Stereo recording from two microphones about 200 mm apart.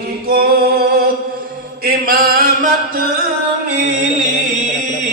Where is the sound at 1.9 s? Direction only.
50° right (ahead or behind).